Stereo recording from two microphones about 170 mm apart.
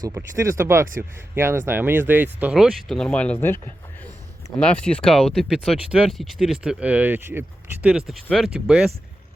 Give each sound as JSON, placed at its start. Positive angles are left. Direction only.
{"t": 0.0, "sound": "speech", "side_deg": -15}